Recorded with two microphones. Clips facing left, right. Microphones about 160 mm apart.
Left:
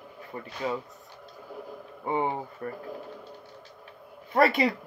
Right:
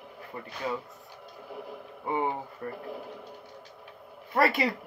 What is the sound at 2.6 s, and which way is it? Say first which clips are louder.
Speech: even; 40° left (ahead or behind).